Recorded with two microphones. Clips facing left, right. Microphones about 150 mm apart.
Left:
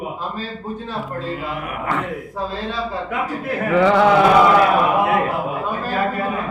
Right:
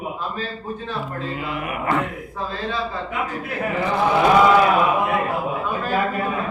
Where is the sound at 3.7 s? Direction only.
80° left.